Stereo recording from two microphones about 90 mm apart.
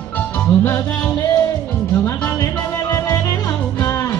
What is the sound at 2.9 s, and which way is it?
Music, 40° left (ahead or behind).